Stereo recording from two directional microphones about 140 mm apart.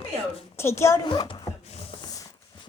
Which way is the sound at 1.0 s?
35° left (ahead or behind).